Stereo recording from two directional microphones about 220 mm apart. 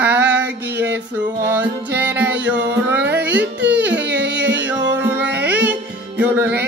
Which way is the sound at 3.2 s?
50° right (ahead or behind).